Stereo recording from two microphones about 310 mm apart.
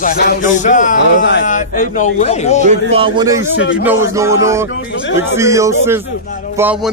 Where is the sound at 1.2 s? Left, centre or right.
Left.